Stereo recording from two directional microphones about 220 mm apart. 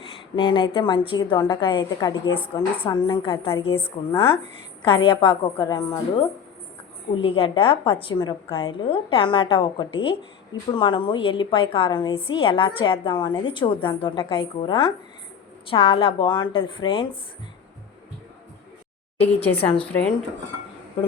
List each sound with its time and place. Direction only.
0.3 s a woman's voice: 20° left (ahead or behind)
19.2 s speech: 10° left (ahead or behind)
19.6 s a woman's voice: 25° left (ahead or behind)
19.9 s speech: 5° left (ahead or behind)